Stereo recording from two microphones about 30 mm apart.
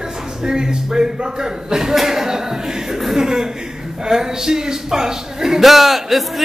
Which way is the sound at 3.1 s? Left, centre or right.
Right.